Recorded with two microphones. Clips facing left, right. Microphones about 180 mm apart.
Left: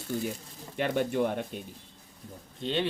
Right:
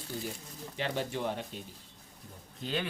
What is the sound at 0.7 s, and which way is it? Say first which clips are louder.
Speech: left 7 dB; 55° left (ahead or behind).